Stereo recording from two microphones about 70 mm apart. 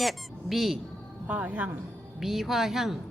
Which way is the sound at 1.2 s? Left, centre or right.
Centre.